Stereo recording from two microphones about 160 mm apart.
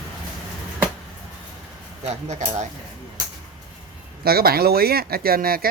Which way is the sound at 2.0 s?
45° right (ahead or behind).